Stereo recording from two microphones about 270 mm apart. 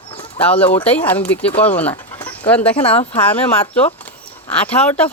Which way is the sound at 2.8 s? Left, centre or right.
Left.